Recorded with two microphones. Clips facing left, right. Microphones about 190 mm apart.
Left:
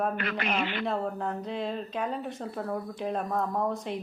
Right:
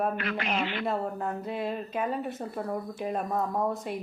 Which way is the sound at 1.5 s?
5° right (ahead or behind).